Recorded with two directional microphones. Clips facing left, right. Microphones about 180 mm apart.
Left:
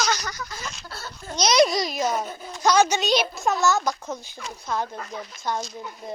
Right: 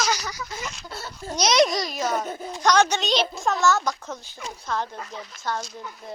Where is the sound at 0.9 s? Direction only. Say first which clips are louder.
Right 3 dB; 20° right (ahead or behind).